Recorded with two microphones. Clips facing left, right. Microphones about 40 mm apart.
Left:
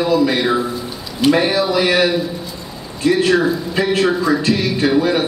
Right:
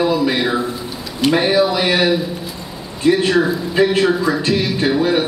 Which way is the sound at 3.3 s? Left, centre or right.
Centre.